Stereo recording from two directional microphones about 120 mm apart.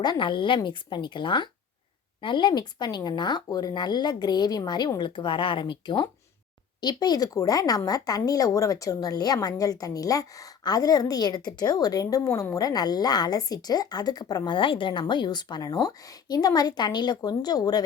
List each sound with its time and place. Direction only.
0.0 s speech: 40° left (ahead or behind)